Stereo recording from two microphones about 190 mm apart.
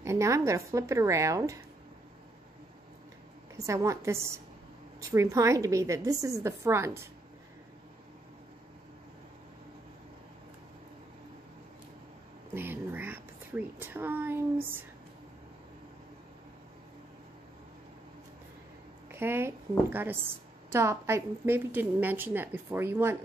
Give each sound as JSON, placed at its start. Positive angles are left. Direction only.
{"t": 0.0, "sound": "a woman's voice", "side_deg": -15}
{"t": 3.5, "sound": "a woman's voice", "side_deg": -15}
{"t": 12.5, "sound": "a woman's voice", "side_deg": -10}
{"t": 19.1, "sound": "a woman's voice", "side_deg": -10}